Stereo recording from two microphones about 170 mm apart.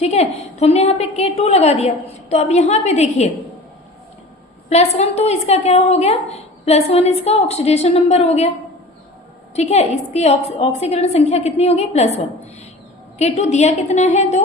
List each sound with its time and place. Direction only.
0.0 s a woman's voice: 40° left (ahead or behind)
4.7 s a woman's voice: 40° left (ahead or behind)
9.6 s a woman's voice: 40° left (ahead or behind)